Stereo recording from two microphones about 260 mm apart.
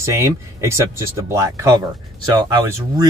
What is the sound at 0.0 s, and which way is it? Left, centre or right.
Speech, centre.